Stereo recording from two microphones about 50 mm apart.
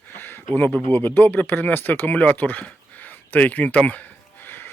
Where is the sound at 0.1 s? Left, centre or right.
Left.